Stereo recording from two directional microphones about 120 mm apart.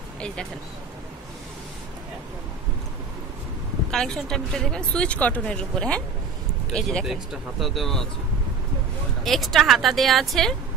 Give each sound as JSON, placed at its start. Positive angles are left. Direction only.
{"t": 3.9, "sound": "a woman's voice", "side_deg": 5}
{"t": 9.2, "sound": "a woman's voice", "side_deg": 0}